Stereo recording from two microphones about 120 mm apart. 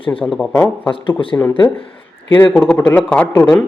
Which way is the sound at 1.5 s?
45° left (ahead or behind).